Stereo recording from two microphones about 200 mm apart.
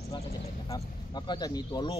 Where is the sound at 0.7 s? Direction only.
20° left (ahead or behind).